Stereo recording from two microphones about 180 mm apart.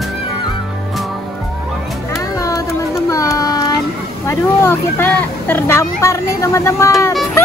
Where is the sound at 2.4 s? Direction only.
20° left (ahead or behind).